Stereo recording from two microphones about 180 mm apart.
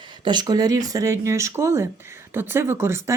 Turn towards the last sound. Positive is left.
turn(degrees=-15)  # may be behind; listen again after turning